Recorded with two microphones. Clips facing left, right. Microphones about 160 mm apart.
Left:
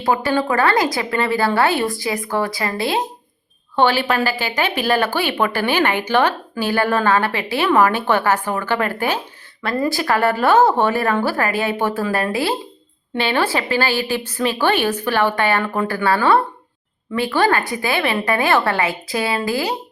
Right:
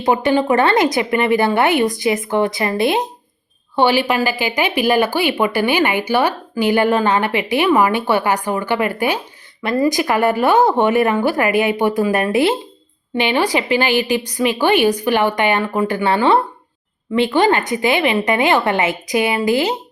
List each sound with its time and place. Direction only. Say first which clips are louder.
0.0 s a woman's voice: right 3 dB; 20° right (ahead or behind)